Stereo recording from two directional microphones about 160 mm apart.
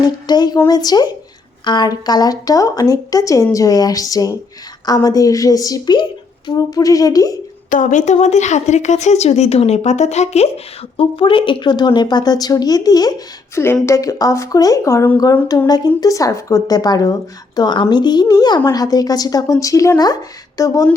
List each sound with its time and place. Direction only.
0.0 s a woman's voice: 25° left (ahead or behind)
7.7 s a woman's voice: 50° left (ahead or behind)
10.9 s speech: 35° left (ahead or behind)